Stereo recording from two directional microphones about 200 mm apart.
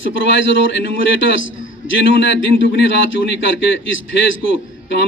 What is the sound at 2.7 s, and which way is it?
A man's voice, 60° left (ahead or behind).